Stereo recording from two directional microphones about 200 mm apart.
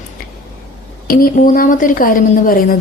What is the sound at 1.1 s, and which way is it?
Speech, 45° left (ahead or behind).